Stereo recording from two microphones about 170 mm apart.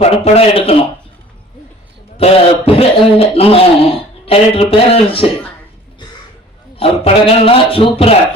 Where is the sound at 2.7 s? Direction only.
35° left (ahead or behind).